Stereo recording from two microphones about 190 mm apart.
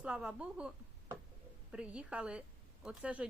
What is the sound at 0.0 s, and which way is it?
Speech, 5° right (ahead or behind).